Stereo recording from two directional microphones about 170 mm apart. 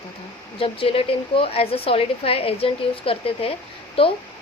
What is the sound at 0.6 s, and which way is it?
A woman's voice, 35° left (ahead or behind).